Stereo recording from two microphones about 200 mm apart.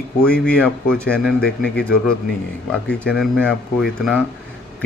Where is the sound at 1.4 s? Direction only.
55° left (ahead or behind).